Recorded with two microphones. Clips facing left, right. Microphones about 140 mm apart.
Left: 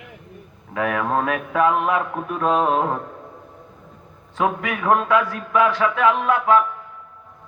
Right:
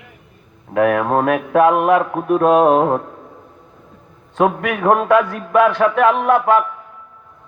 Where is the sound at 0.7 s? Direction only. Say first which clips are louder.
Right 7 dB; 55° right (ahead or behind).